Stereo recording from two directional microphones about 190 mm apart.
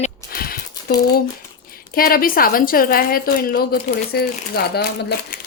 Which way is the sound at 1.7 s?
50° left (ahead or behind).